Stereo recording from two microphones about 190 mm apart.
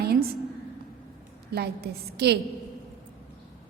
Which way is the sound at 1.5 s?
55° right (ahead or behind).